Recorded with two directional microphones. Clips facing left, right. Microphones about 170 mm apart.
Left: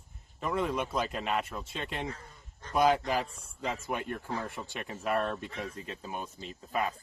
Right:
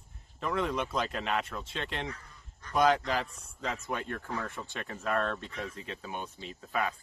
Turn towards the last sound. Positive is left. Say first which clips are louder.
# even
turn(degrees=0)  # may be behind; listen again after turning